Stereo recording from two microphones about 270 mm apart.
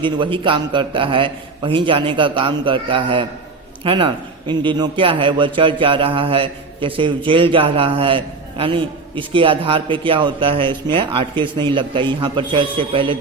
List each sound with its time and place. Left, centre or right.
0.0 s a man's voice: centre